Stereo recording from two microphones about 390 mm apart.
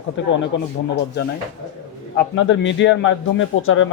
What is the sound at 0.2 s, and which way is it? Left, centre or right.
Speech, left.